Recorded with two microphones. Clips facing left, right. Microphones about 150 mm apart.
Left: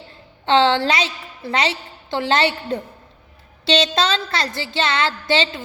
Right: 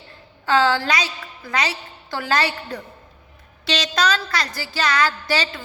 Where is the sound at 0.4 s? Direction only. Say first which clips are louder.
Left 3 dB; 25° left (ahead or behind).